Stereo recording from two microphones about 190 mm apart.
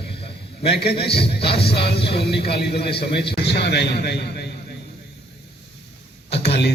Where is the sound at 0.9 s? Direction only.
30° left (ahead or behind).